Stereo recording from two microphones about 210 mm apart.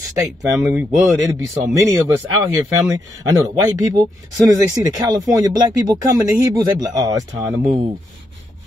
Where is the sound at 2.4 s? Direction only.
15° right (ahead or behind).